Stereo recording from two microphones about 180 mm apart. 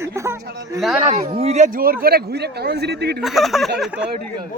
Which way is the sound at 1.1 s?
35° right (ahead or behind).